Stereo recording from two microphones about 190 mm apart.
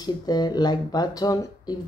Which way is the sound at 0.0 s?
20° left (ahead or behind).